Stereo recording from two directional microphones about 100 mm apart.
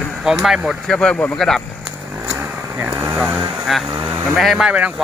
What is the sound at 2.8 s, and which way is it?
Speech, 15° right (ahead or behind).